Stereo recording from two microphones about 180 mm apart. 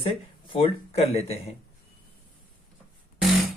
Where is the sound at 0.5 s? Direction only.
30° left (ahead or behind).